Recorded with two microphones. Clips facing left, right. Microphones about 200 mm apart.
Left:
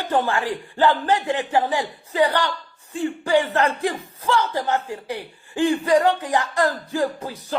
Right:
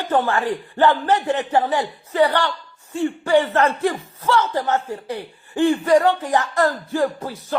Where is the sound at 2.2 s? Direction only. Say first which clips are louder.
Right 2 dB; 15° left (ahead or behind).